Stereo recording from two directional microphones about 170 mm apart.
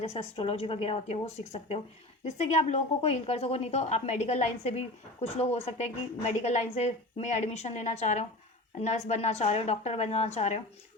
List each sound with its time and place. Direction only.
0.0 s a woman's voice: 35° left (ahead or behind)